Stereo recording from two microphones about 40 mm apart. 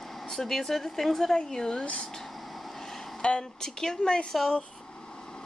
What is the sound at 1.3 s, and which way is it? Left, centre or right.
Speech, centre.